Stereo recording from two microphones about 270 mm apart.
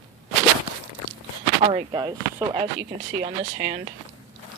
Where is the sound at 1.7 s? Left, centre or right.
Centre.